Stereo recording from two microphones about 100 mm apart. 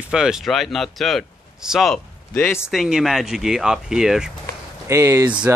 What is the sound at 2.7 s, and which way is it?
Speech, centre (ahead or behind).